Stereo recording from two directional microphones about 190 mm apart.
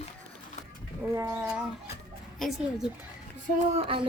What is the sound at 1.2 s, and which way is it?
Speech, 10° right (ahead or behind).